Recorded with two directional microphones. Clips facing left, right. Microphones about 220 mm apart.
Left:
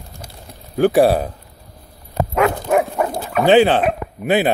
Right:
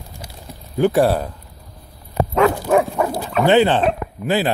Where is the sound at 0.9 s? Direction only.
15° left (ahead or behind).